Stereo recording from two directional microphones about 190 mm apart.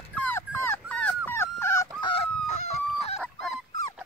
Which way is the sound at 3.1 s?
Centre (ahead or behind).